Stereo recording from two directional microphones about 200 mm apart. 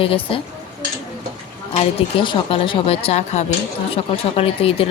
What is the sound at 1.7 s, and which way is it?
Speech, 30° left (ahead or behind).